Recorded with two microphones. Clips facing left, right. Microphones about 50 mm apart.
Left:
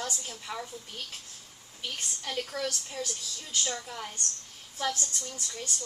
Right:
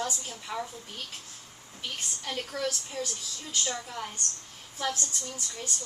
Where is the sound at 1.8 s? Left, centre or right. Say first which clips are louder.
Even; centre.